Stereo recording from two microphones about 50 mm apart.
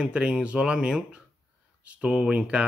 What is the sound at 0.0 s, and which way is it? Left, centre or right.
Speech, centre.